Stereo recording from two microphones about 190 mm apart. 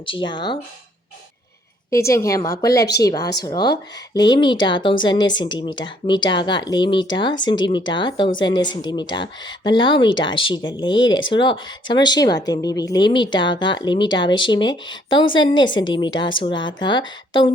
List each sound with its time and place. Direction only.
0.0 s a woman's voice: 25° left (ahead or behind)
1.9 s a woman's voice: 15° left (ahead or behind)